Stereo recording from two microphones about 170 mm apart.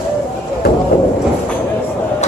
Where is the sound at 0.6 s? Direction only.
65° left (ahead or behind).